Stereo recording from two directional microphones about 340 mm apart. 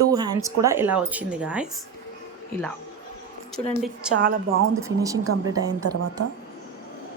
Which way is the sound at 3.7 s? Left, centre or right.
Centre.